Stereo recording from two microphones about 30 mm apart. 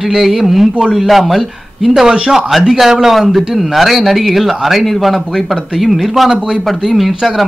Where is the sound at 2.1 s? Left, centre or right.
Right.